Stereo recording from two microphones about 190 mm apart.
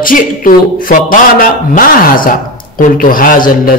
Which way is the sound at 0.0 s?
45° left (ahead or behind).